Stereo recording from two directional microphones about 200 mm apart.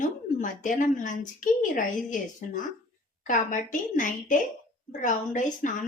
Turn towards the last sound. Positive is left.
turn(degrees=40)  # may be behind; listen again after turning